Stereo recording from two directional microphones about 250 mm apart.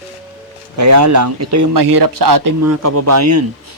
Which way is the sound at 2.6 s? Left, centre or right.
Right.